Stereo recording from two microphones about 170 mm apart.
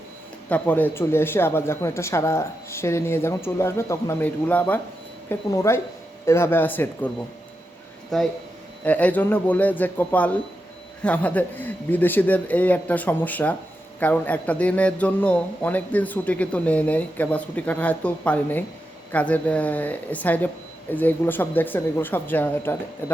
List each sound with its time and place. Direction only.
0.4 s a man's voice: 10° left (ahead or behind)
8.1 s a man's voice: centre (ahead or behind)